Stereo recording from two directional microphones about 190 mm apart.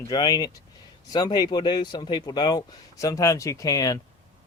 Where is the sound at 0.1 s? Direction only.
20° left (ahead or behind).